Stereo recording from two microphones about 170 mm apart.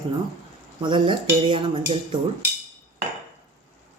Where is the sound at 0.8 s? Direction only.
30° right (ahead or behind).